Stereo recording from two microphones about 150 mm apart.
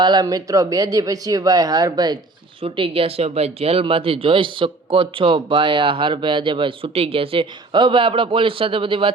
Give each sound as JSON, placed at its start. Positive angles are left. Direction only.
{"t": 0.0, "sound": "speech", "side_deg": -30}